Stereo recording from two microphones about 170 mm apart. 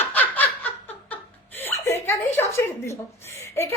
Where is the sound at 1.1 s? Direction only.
10° left (ahead or behind).